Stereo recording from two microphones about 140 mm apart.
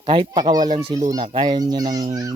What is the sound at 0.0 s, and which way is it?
Speech, 35° right (ahead or behind).